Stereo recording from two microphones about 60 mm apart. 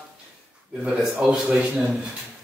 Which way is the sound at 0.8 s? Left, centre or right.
Centre.